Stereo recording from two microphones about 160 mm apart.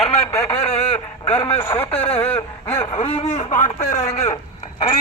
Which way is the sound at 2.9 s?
40° left (ahead or behind).